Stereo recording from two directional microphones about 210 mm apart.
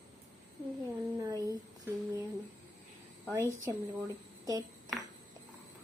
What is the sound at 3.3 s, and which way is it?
Child singing, 15° right (ahead or behind).